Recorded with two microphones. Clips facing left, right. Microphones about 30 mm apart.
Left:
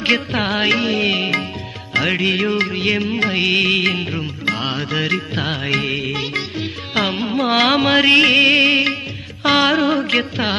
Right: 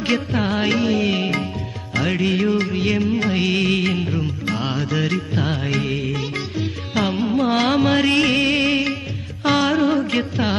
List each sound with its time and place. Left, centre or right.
0.0 s music: left